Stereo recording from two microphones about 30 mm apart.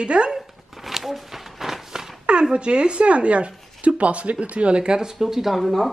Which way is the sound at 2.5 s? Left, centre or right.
Right.